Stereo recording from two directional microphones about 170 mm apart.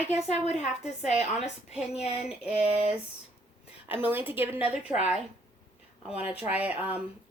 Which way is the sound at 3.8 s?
10° right (ahead or behind).